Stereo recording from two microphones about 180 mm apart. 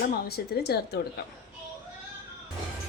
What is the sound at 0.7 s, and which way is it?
Speech, 65° left (ahead or behind).